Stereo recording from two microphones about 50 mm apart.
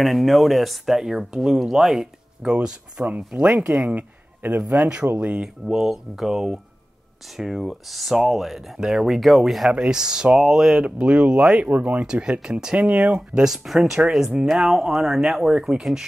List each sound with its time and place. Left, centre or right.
0.0 s speech: centre
3.4 s speech: right
5.3 s speech: centre
9.7 s speech: centre
10.8 s speech: right
13.7 s speech: centre